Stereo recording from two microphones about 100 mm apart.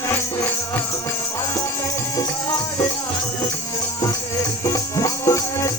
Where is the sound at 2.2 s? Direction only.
35° left (ahead or behind).